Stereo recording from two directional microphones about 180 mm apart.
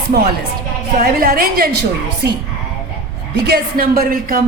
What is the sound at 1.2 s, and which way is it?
Speech, 55° right (ahead or behind).